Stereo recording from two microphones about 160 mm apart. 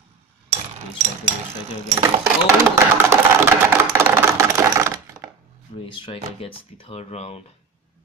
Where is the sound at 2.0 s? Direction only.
20° right (ahead or behind).